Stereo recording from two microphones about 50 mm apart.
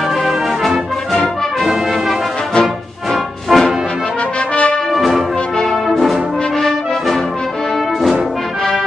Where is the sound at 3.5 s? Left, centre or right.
Centre.